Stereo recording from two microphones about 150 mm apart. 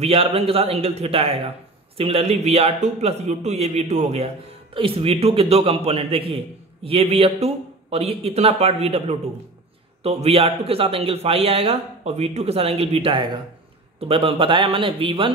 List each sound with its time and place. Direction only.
0.0 s a man's voice: 40° right (ahead or behind)